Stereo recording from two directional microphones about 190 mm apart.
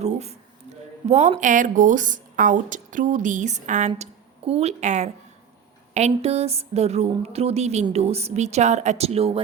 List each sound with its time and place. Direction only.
0.0 s a woman's voice: 35° right (ahead or behind)